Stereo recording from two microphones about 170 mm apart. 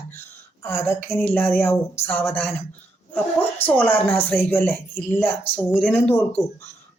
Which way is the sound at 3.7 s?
10° left (ahead or behind).